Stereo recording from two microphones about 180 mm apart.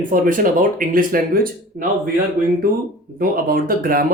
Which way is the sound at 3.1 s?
50° right (ahead or behind).